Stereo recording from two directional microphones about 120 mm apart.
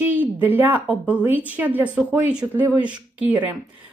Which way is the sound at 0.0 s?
15° right (ahead or behind).